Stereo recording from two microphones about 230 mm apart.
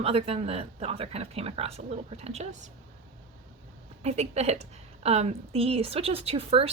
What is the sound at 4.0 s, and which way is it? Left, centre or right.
Speech, right.